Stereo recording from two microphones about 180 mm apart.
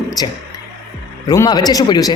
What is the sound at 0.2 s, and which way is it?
A man's voice, 20° left (ahead or behind).